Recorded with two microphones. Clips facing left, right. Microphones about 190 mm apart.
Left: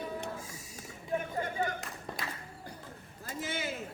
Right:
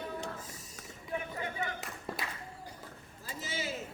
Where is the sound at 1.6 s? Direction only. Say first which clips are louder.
Left 5 dB; 30° left (ahead or behind).